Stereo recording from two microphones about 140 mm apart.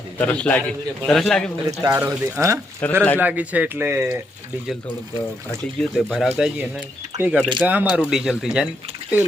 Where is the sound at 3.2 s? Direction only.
10° right (ahead or behind).